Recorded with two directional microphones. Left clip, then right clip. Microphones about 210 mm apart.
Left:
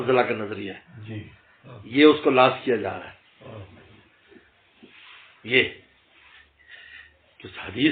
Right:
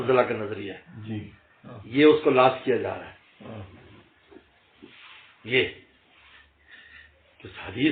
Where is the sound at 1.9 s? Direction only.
40° left (ahead or behind).